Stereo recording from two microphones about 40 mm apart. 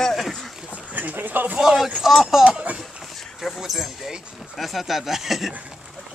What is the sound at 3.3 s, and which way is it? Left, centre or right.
Speech, centre.